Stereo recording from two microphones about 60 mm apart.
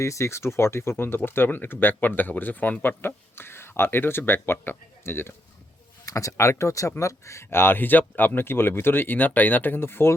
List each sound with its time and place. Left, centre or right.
0.0 s speech: left
6.1 s speech: left